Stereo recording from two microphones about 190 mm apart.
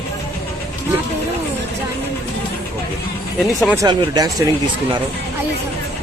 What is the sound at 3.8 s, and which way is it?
Speech, 20° right (ahead or behind).